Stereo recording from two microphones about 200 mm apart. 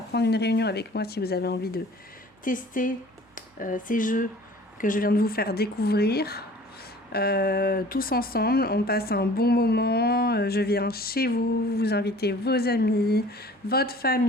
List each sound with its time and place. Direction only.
0.1 s speech: 55° left (ahead or behind)